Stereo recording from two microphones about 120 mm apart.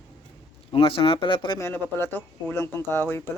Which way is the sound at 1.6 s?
20° left (ahead or behind).